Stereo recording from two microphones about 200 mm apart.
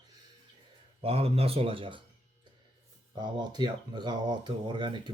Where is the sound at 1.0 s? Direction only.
30° right (ahead or behind).